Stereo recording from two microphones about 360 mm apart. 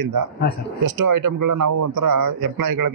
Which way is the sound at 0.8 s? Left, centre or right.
Right.